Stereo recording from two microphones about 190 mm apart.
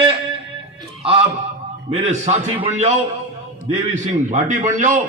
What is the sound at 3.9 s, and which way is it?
A man's voice, 40° right (ahead or behind).